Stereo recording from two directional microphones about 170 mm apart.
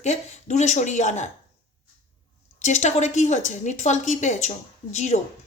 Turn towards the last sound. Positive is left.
turn(degrees=45)  # may be behind; listen again after turning